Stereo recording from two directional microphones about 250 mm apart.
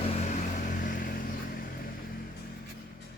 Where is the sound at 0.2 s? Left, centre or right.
Left.